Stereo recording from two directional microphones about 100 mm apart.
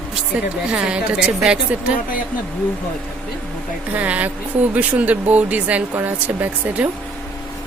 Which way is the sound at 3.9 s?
15° right (ahead or behind).